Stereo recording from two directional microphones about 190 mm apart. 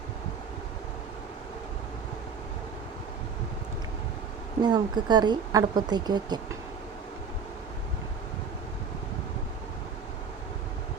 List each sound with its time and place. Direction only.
4.6 s speech: 20° right (ahead or behind)